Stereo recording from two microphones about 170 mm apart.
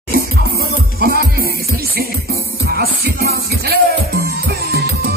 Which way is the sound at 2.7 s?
65° right (ahead or behind).